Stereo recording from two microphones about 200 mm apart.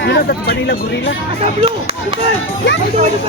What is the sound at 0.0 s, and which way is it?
Speech, 55° left (ahead or behind).